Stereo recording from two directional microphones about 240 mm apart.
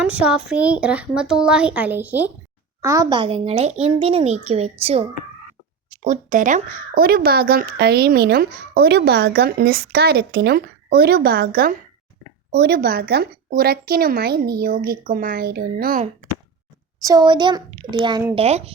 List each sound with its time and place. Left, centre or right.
0.0 s a woman's voice: centre; by 5.0 s right
6.1 s speech: right
17.0 s a child's voice: centre